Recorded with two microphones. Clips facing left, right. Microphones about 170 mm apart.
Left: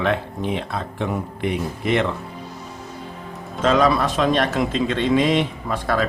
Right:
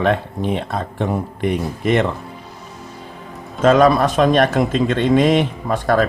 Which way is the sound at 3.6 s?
50° right (ahead or behind).